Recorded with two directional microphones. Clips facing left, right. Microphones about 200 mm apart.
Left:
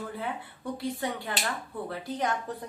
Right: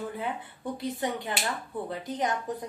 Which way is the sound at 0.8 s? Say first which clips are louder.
Right 1 dB; 20° right (ahead or behind).